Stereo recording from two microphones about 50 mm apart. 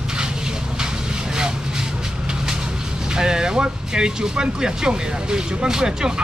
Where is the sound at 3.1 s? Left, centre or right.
Centre.